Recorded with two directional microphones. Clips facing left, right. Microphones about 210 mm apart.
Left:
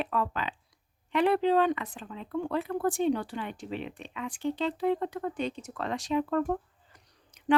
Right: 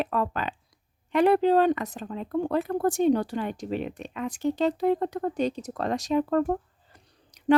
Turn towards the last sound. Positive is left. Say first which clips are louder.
# right 2 dB
turn(degrees=-40)  # may be behind; listen again after turning